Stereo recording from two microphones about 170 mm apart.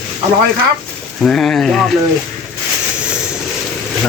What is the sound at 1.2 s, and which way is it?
Speech, 5° left (ahead or behind).